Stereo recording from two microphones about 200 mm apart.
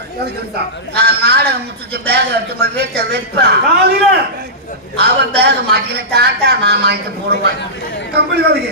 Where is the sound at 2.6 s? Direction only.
55° right (ahead or behind).